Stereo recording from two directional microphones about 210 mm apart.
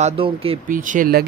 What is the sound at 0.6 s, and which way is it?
Speech, 40° right (ahead or behind).